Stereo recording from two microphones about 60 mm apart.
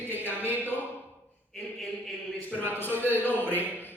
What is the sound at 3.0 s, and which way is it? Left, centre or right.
Speech, left.